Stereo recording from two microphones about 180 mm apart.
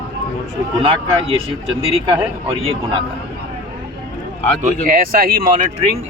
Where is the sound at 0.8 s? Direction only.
30° right (ahead or behind).